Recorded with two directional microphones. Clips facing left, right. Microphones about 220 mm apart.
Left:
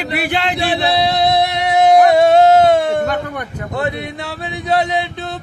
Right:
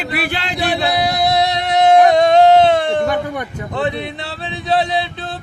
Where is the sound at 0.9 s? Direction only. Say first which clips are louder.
Left 2 dB; 25° left (ahead or behind).